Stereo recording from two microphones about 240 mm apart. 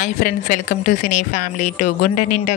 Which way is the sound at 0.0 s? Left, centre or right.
Left.